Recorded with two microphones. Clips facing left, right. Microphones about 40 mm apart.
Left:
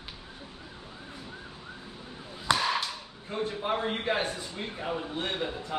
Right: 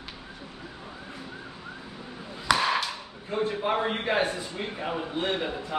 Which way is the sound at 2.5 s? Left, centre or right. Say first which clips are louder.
Right 3 dB; right.